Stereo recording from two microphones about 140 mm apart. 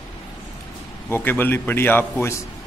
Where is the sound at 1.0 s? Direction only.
15° left (ahead or behind).